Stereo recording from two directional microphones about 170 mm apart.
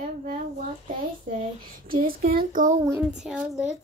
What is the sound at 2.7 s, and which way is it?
Speech, 15° right (ahead or behind).